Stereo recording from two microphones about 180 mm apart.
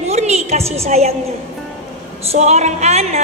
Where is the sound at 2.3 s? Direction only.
40° right (ahead or behind).